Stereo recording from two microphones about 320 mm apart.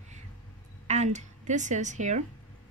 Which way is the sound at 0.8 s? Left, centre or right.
Right.